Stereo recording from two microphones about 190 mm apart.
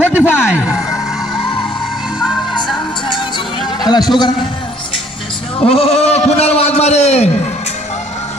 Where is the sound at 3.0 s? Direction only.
25° left (ahead or behind).